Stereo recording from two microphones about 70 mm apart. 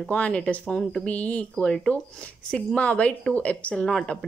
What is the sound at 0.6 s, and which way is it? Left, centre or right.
Speech, centre.